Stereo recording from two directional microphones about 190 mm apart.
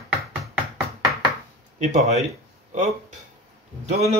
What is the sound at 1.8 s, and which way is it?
Speech, 35° right (ahead or behind).